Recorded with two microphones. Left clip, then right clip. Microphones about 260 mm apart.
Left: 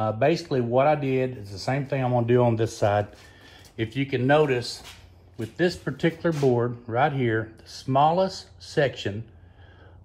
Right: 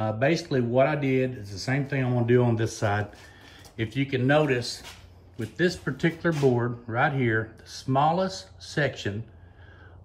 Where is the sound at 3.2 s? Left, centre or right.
Centre.